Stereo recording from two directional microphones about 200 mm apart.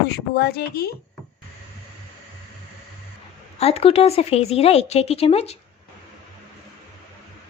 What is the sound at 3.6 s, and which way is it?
A woman's voice, 30° left (ahead or behind).